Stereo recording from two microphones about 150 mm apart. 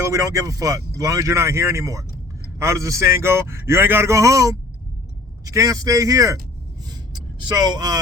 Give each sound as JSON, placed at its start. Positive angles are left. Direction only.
{"t": 0.0, "sound": "speech", "side_deg": -20}
{"t": 6.9, "sound": "vehicle", "side_deg": -30}